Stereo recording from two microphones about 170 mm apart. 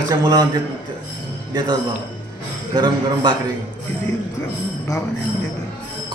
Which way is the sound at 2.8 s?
25° right (ahead or behind).